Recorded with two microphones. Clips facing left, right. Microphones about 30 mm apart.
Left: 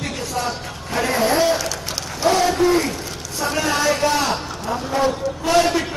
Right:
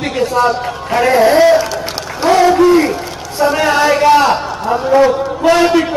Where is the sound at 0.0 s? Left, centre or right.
Right.